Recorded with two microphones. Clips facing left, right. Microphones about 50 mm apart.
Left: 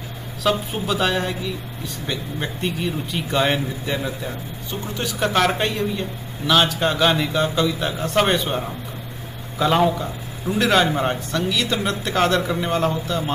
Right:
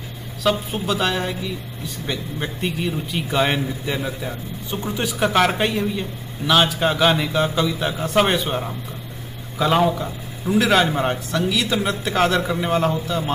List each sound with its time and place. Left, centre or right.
0.4 s a man's voice: centre
4.6 s speech: centre
5.2 s a man's voice: centre